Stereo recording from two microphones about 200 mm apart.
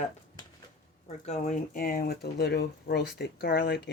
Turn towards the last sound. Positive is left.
turn(degrees=55)  # may be behind; listen again after turning